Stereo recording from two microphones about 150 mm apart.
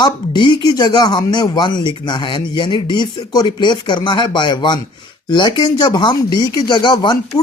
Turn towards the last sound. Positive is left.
turn(degrees=30)  # may be behind; listen again after turning